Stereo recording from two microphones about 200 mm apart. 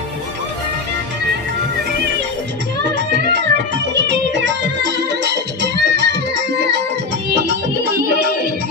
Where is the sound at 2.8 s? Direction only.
60° right (ahead or behind).